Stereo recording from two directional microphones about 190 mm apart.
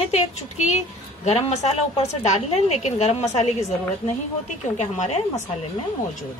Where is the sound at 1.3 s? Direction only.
35° left (ahead or behind).